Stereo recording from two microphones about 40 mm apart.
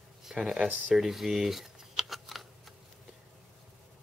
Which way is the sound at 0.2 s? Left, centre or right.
Centre.